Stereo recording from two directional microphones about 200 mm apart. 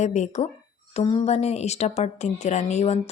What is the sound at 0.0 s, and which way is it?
Speech, 35° left (ahead or behind).